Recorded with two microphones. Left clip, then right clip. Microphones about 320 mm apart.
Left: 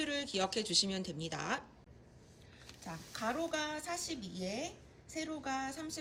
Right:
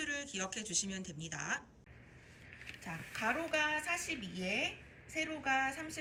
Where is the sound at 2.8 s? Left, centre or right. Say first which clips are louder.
Right 2 dB; centre.